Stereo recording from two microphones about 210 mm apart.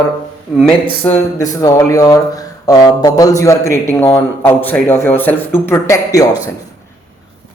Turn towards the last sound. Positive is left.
turn(degrees=15)  # may be behind; listen again after turning